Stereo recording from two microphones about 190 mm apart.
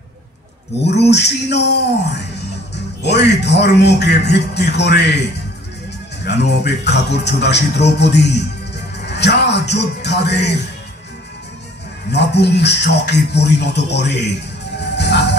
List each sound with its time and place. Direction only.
1.1 s a man's voice: 60° left (ahead or behind)
6.2 s a man's voice: 60° left (ahead or behind)
12.1 s a man's voice: 65° left (ahead or behind)
14.8 s music: 65° left (ahead or behind)